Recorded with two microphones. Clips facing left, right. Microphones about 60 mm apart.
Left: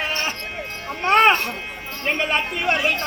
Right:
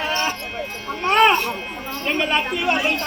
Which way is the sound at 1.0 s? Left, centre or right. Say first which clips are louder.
Even; left.